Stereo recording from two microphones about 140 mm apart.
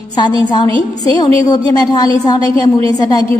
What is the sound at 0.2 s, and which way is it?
A woman's voice, 30° left (ahead or behind).